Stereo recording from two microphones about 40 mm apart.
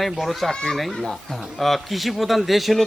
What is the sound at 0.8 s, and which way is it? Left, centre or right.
Speech, centre.